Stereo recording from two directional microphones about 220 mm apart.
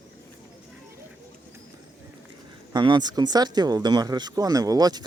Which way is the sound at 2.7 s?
20° right (ahead or behind).